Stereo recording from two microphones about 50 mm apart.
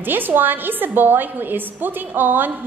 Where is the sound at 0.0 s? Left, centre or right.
Right.